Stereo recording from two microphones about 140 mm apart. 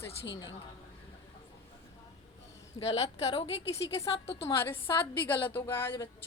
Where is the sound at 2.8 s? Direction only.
45° left (ahead or behind).